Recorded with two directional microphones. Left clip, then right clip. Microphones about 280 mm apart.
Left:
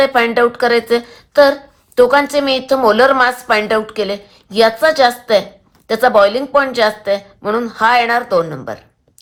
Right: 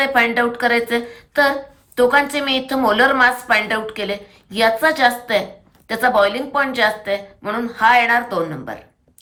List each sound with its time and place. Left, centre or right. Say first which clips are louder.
0.0 s a woman's voice: left 4 dB; centre